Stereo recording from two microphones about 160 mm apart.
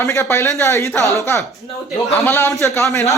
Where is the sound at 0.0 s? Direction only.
15° left (ahead or behind).